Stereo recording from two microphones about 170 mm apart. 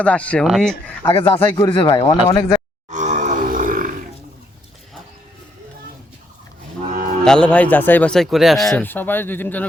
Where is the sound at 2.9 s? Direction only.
45° right (ahead or behind).